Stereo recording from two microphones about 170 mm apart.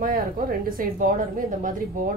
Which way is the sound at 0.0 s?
55° right (ahead or behind).